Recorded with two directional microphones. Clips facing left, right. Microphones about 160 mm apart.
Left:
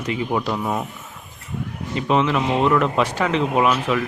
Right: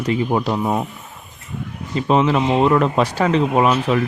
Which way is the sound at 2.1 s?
35° right (ahead or behind).